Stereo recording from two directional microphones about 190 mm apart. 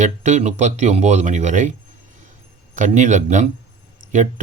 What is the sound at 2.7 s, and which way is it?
Speech, 40° right (ahead or behind).